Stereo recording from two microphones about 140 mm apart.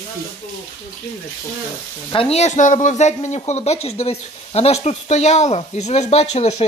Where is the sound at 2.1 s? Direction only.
45° left (ahead or behind).